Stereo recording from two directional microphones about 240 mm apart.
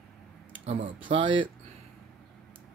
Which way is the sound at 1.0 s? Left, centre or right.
Right.